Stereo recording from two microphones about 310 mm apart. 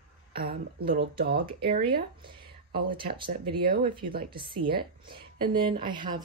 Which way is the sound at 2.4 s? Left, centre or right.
Right.